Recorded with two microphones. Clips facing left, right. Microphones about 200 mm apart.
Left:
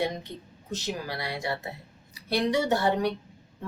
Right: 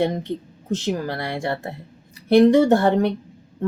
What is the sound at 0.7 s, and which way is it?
Speech, 50° right (ahead or behind).